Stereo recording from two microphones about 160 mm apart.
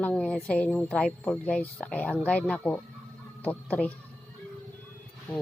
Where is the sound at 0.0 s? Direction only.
5° left (ahead or behind).